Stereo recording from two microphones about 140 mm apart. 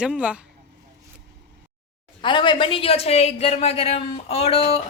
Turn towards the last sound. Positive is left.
turn(degrees=45)  # may be behind; listen again after turning